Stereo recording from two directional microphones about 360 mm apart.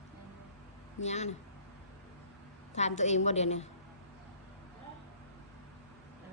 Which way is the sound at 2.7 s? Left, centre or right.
Centre.